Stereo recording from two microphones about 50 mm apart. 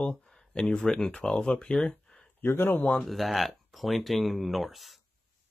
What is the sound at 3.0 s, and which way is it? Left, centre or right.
Speech, centre.